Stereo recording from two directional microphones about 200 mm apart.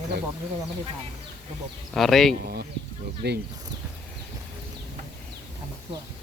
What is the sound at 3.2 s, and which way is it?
Speech, 55° right (ahead or behind).